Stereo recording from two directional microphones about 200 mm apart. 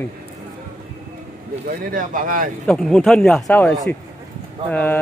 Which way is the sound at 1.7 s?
45° right (ahead or behind).